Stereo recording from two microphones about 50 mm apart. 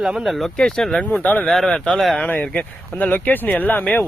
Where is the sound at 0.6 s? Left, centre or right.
Centre.